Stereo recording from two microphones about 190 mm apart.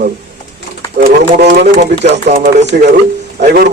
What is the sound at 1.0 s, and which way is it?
Speech, 60° right (ahead or behind).